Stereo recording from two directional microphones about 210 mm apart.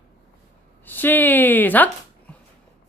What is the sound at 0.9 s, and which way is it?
Speech, 10° left (ahead or behind).